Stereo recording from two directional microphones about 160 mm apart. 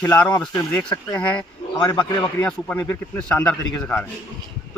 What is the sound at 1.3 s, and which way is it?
Speech, 25° left (ahead or behind).